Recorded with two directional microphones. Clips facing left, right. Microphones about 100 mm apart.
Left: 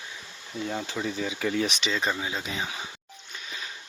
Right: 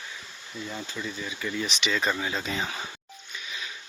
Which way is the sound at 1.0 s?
70° left (ahead or behind).